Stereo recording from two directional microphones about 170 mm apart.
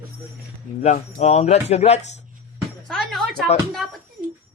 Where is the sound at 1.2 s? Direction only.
40° left (ahead or behind).